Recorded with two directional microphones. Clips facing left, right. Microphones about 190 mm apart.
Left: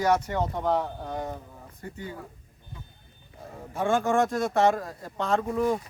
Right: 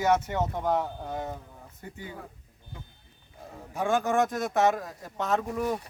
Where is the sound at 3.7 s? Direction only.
Centre (ahead or behind).